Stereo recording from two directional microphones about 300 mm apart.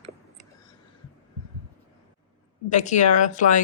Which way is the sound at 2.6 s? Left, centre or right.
Left.